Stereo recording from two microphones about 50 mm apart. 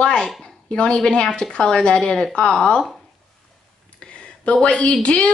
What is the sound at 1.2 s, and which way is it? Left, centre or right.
A woman's voice, centre.